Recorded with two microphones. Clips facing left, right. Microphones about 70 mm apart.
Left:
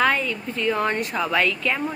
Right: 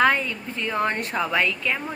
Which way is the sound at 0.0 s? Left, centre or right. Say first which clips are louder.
Right 1 dB; right.